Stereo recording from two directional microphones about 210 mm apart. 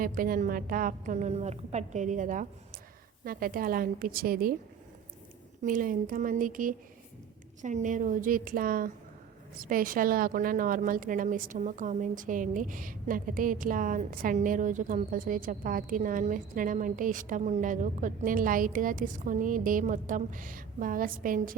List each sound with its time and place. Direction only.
0.0 s a woman's voice: 40° right (ahead or behind)
5.6 s a woman's voice: 40° right (ahead or behind)